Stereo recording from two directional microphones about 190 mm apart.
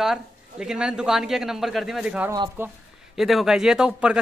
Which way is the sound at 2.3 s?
15° right (ahead or behind).